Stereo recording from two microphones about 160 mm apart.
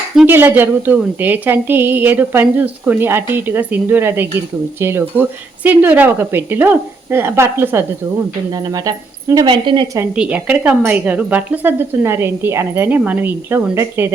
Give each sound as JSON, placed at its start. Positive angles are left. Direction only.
{"t": 0.3, "sound": "speech", "side_deg": -15}
{"t": 10.2, "sound": "speech", "side_deg": -10}